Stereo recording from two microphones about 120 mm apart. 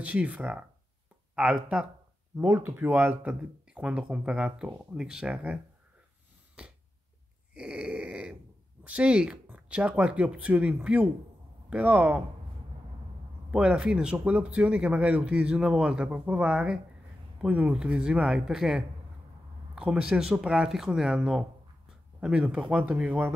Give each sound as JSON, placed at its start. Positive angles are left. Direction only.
{"t": 0.0, "sound": "speech", "side_deg": -10}
{"t": 2.3, "sound": "speech", "side_deg": -20}
{"t": 6.6, "sound": "a sound", "side_deg": -10}
{"t": 7.5, "sound": "speech", "side_deg": -5}
{"t": 13.5, "sound": "speech", "side_deg": -10}